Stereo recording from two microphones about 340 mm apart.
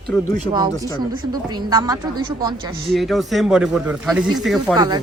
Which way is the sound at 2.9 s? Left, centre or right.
Centre.